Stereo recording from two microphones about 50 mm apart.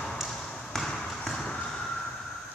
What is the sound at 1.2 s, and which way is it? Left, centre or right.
Vehicle, centre.